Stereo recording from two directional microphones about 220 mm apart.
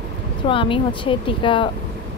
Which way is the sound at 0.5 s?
25° left (ahead or behind).